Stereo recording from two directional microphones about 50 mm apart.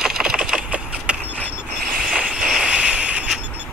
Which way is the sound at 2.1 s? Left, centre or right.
Centre.